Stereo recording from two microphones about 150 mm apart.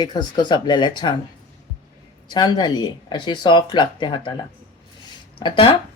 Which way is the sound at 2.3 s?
30° left (ahead or behind).